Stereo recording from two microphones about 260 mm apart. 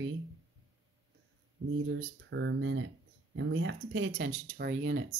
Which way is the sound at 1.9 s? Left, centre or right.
Right.